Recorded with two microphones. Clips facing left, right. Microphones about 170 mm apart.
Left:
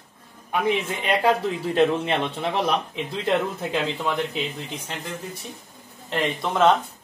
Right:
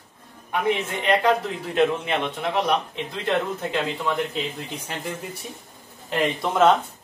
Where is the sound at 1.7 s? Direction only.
30° left (ahead or behind).